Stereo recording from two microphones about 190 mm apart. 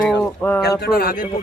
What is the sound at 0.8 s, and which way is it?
Speech, 55° left (ahead or behind).